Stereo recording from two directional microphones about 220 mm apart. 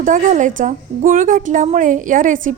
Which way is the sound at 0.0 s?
35° right (ahead or behind).